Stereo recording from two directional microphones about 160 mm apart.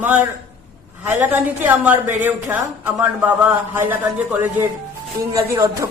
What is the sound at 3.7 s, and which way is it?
A man's voice, 10° right (ahead or behind).